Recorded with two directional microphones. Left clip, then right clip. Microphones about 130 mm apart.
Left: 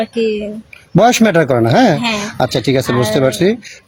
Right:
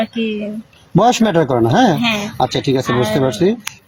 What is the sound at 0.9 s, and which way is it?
Speech, 45° left (ahead or behind).